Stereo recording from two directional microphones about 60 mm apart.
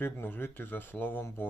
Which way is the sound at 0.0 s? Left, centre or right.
Left.